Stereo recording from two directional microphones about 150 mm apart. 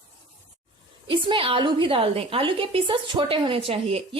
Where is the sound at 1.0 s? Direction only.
35° right (ahead or behind).